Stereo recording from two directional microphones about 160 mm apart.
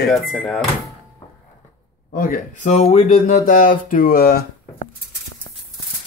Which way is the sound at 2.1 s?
60° left (ahead or behind).